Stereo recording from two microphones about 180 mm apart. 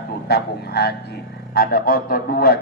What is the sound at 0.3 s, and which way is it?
A man's voice, 60° left (ahead or behind).